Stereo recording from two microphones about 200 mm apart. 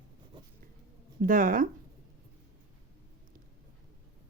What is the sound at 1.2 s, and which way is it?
Speech, 40° right (ahead or behind).